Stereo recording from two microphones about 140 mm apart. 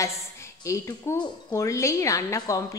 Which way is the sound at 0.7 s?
20° left (ahead or behind).